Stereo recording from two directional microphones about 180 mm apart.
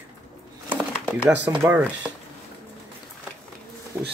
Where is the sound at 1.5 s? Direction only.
20° right (ahead or behind).